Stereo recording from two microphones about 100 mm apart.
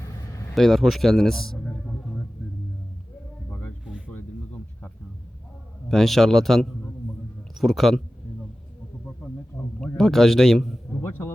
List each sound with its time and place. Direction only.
0.5 s speech: centre (ahead or behind)
1.8 s a sound: 10° left (ahead or behind)
3.5 s music: 15° left (ahead or behind)
4.1 s a sound: 15° left (ahead or behind)
5.9 s speech: 5° left (ahead or behind)
10.0 s speech: 5° left (ahead or behind)
11.0 s music: 20° left (ahead or behind)